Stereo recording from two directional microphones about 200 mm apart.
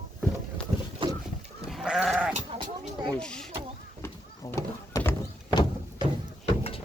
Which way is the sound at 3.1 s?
5° left (ahead or behind).